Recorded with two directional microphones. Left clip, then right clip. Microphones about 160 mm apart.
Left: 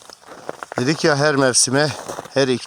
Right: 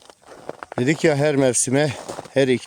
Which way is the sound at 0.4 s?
85° left.